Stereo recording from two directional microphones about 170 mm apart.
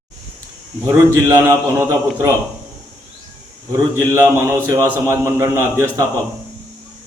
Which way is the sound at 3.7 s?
15° right (ahead or behind).